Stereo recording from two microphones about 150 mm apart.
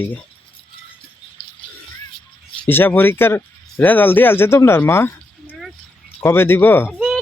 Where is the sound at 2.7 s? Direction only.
15° left (ahead or behind).